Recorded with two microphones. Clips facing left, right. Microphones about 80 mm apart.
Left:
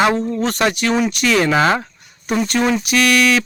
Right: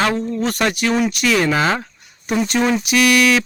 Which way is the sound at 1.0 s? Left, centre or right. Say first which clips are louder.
Left 1 dB; centre.